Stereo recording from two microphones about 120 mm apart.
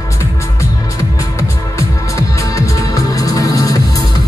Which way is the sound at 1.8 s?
25° left (ahead or behind).